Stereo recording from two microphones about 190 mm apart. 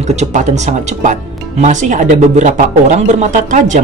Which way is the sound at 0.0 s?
35° right (ahead or behind).